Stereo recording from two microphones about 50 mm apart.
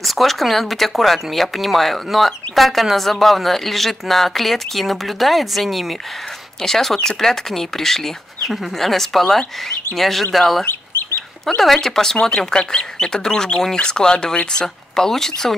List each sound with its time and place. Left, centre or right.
0.0 s speech: centre
10.6 s chicken: left
11.4 s speech: centre
15.0 s speech: centre